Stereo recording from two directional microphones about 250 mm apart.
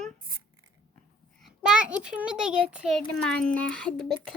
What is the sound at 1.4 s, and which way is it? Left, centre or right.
A child's voice, centre.